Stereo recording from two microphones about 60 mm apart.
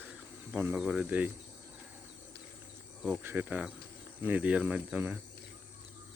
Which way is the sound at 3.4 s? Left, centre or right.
Right.